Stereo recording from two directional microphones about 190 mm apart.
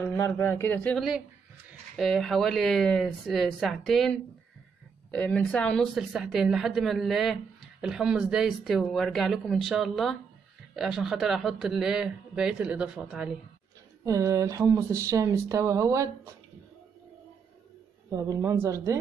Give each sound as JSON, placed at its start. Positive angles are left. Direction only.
{"t": 0.0, "sound": "a woman's voice", "side_deg": 10}
{"t": 14.0, "sound": "speech", "side_deg": -15}
{"t": 18.1, "sound": "speech", "side_deg": -15}